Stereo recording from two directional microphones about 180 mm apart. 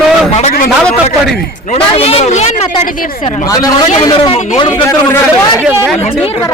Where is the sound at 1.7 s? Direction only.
35° left (ahead or behind).